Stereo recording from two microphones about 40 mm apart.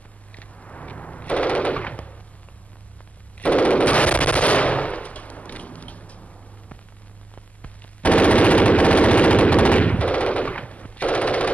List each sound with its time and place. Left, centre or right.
0.6 s machine gun: left
3.3 s machine gun: left
7.6 s machine gun: left